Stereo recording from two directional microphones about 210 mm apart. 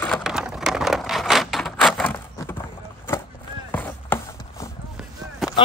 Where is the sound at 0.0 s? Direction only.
Centre (ahead or behind).